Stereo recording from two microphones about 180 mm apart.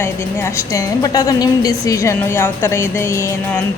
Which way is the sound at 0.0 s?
15° left (ahead or behind).